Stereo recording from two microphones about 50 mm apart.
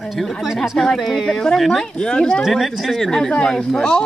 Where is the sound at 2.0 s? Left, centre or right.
Centre.